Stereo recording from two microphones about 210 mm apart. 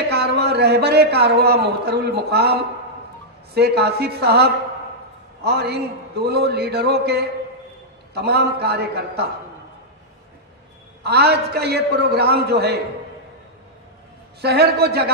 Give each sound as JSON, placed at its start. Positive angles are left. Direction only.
{"t": 0.1, "sound": "a man's voice", "side_deg": -50}
{"t": 11.1, "sound": "a man's voice", "side_deg": -50}
{"t": 14.4, "sound": "a man's voice", "side_deg": -50}